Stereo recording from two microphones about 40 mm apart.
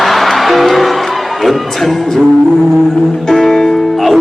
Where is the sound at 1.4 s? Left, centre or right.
Centre.